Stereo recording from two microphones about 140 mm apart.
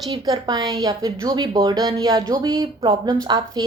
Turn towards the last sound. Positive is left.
turn(degrees=-30)  # may be behind; listen again after turning